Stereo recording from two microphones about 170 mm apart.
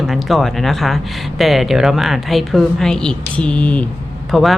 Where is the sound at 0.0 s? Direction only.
Centre (ahead or behind).